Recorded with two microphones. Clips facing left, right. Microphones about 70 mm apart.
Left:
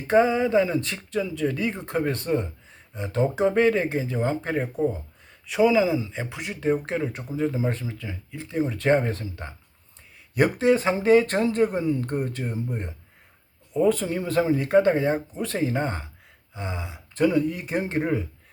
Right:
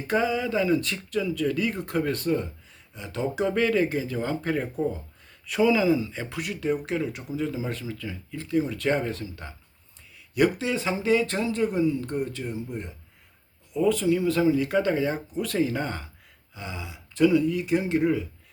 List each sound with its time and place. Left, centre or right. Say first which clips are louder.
0.1 s speech: left 6 dB; left